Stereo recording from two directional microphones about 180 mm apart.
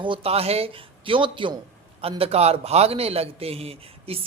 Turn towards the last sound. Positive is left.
turn(degrees=-35)  # may be behind; listen again after turning